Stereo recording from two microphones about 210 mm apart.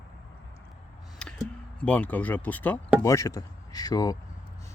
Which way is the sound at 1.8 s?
5° left (ahead or behind).